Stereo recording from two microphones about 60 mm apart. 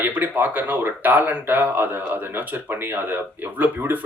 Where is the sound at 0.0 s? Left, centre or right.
Right.